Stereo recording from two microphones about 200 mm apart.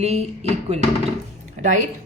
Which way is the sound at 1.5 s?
40° right (ahead or behind).